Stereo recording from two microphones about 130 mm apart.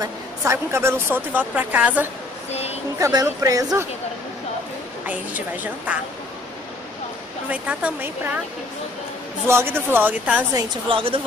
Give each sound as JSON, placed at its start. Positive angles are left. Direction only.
{"t": 0.0, "sound": "a woman's voice", "side_deg": -20}
{"t": 2.5, "sound": "a sound", "side_deg": 55}
{"t": 3.0, "sound": "speech", "side_deg": -25}
{"t": 5.0, "sound": "a woman's voice", "side_deg": -10}
{"t": 7.4, "sound": "a woman's voice", "side_deg": -10}
{"t": 9.5, "sound": "a woman's voice", "side_deg": -20}
{"t": 10.5, "sound": "a woman's voice", "side_deg": -40}